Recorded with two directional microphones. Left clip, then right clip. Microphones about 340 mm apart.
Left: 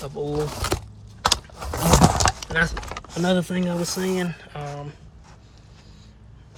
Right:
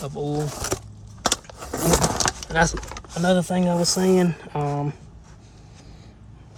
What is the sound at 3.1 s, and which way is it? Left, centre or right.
Speech, centre.